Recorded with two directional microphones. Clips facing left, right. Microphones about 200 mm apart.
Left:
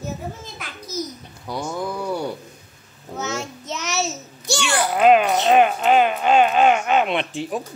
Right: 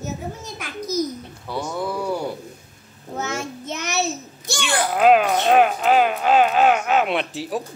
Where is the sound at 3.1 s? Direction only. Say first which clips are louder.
Right 1 dB; 55° right (ahead or behind).